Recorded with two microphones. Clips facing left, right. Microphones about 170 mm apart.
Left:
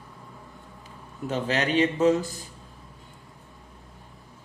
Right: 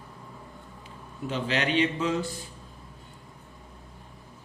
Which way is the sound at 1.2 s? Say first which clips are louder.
Left 2 dB; 45° left (ahead or behind).